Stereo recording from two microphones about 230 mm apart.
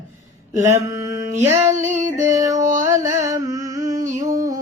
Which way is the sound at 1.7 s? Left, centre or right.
Right.